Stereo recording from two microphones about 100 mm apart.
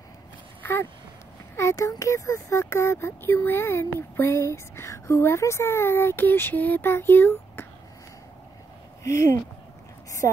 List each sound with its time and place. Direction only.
0.6 s a sound: 20° left (ahead or behind)
1.6 s speech: 30° left (ahead or behind)
9.0 s speech: 30° left (ahead or behind)